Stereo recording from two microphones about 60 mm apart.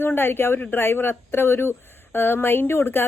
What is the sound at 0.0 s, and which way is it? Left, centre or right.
Speech, left.